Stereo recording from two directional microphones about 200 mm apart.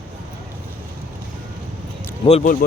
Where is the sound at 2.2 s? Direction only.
40° left (ahead or behind).